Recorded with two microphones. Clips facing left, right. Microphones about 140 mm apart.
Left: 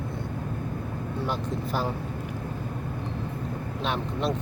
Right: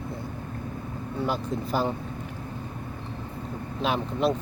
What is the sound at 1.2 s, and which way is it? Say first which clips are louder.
Speech: right 3 dB; centre (ahead or behind).